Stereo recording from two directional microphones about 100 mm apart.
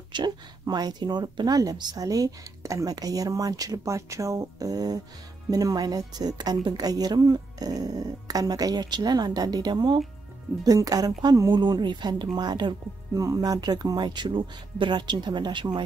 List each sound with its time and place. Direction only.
0.1 s speech: 45° right (ahead or behind)
11.5 s speech: 50° right (ahead or behind)